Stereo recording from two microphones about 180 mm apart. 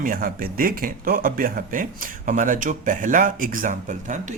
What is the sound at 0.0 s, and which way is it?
Speech, 50° right (ahead or behind).